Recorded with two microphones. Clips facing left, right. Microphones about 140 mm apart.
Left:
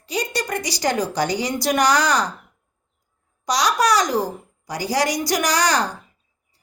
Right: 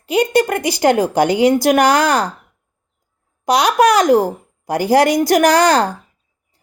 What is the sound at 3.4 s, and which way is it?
A woman's voice, 55° right (ahead or behind).